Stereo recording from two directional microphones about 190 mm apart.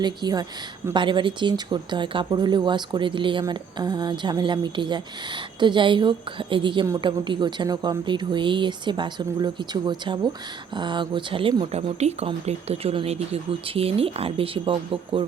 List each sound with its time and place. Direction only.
0.0 s speech: 20° right (ahead or behind)